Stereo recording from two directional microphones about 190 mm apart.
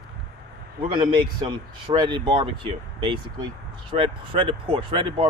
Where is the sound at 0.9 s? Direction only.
25° right (ahead or behind).